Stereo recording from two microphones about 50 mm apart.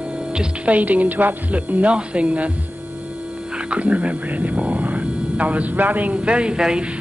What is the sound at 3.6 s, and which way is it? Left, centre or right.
Speech, right.